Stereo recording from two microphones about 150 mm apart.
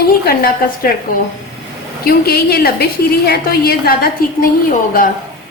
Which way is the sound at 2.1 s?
90° left.